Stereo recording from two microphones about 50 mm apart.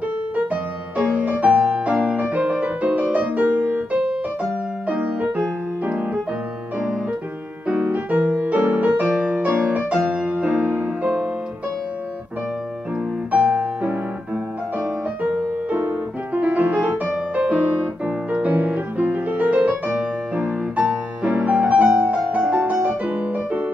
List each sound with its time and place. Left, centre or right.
0.5 s music: right
7.6 s music: right
13.3 s music: right
15.3 s music: right
19.9 s music: centre
20.4 s music: right